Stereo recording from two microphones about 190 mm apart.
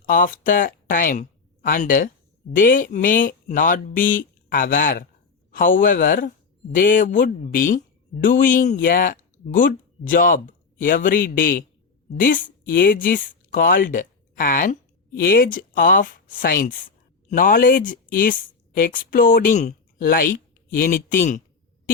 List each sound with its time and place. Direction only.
0.0 s speech: 45° left (ahead or behind)